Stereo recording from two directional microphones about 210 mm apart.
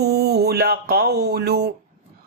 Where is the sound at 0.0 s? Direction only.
50° right (ahead or behind).